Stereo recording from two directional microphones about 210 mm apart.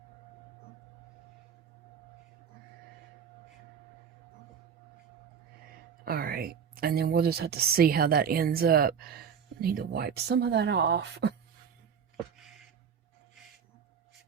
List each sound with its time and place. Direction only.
6.1 s a woman's voice: 45° right (ahead or behind)